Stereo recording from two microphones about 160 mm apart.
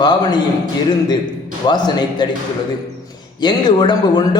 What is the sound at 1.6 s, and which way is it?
Speech, 25° left (ahead or behind).